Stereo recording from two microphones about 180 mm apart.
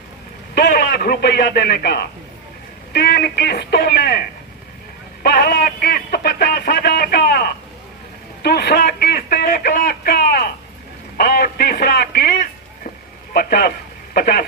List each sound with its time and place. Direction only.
0.5 s a man's voice: 60° left (ahead or behind)
5.2 s speech: 55° left (ahead or behind)
11.2 s radio: 55° left (ahead or behind)
13.3 s a man's voice: 60° left (ahead or behind)